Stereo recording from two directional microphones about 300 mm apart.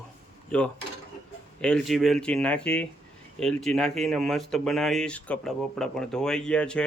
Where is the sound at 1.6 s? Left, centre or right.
Centre.